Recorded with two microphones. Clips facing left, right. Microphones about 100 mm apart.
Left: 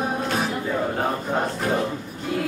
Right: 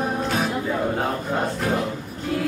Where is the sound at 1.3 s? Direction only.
Centre (ahead or behind).